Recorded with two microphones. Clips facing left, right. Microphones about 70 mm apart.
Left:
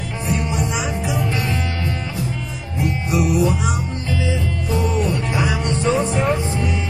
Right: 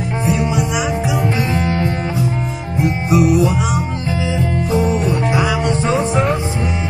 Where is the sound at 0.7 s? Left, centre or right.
Right.